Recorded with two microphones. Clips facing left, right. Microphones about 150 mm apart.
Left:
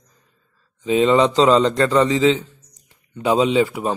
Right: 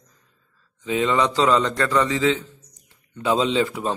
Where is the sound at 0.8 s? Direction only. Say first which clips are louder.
Left 6 dB; 25° left (ahead or behind).